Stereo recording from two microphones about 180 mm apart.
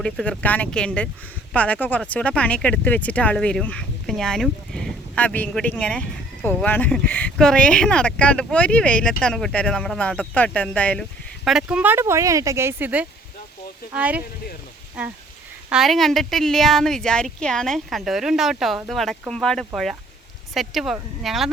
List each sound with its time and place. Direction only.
0.0 s speech: 5° left (ahead or behind)
11.4 s speech: 5° right (ahead or behind)
15.7 s speech: centre (ahead or behind)